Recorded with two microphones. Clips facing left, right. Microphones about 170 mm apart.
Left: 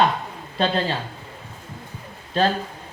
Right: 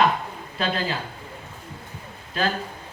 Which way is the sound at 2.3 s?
30° left (ahead or behind).